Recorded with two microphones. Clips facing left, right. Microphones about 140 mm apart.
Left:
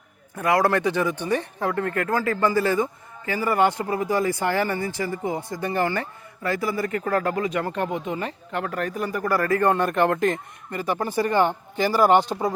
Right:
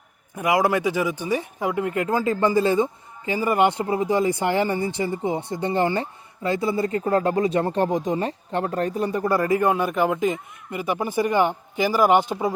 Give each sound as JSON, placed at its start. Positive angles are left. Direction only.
{"t": 0.3, "sound": "speech", "side_deg": -15}